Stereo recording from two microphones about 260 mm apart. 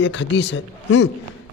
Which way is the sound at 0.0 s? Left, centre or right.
Left.